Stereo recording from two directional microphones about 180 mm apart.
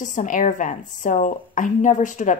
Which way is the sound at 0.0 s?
45° left (ahead or behind).